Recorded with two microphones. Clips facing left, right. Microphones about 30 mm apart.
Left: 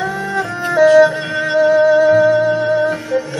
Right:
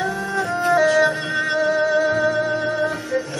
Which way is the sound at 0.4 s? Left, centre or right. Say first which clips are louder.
Left 4 dB; centre.